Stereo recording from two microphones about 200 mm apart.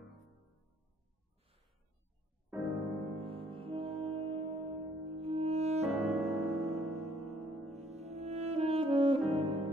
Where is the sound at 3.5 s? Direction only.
30° right (ahead or behind).